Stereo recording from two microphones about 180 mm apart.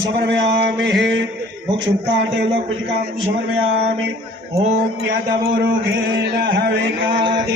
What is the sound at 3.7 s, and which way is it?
Chant, 75° right (ahead or behind).